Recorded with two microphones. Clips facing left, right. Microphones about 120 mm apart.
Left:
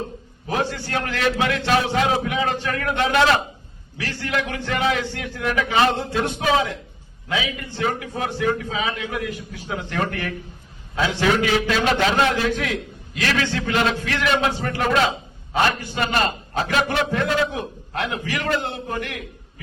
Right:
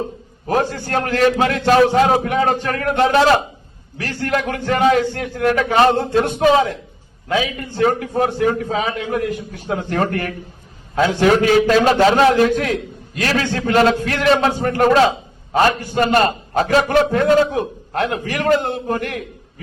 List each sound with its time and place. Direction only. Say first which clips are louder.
0.4 s a man's voice: right 5 dB; 45° right (ahead or behind)